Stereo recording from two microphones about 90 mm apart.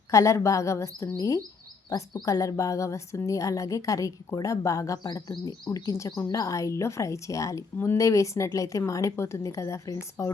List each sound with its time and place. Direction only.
0.1 s speech: 35° left (ahead or behind)